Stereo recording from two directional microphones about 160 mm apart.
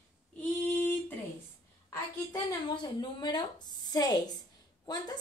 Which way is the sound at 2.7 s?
25° left (ahead or behind).